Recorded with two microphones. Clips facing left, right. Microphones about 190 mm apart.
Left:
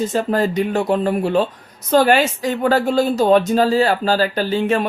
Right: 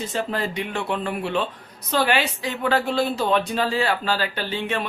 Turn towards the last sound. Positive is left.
turn(degrees=40)  # may be behind; listen again after turning